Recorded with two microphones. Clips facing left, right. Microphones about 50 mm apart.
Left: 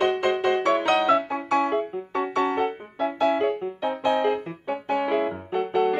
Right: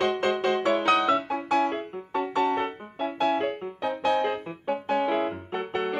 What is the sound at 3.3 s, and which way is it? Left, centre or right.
Music, centre.